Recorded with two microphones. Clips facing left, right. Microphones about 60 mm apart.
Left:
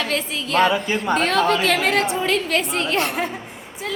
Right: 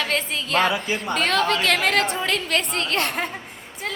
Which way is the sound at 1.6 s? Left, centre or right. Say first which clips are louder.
Left 1 dB; right.